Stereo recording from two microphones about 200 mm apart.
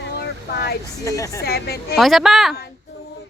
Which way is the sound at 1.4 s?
50° left (ahead or behind).